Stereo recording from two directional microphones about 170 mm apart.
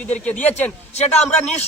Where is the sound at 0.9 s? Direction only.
40° left (ahead or behind).